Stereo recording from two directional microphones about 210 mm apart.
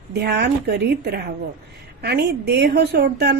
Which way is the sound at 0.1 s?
50° right (ahead or behind).